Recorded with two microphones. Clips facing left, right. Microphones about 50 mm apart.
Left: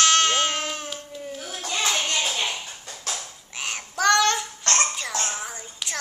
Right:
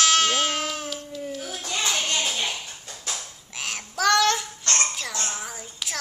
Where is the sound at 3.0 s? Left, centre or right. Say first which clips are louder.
Left 1 dB; centre.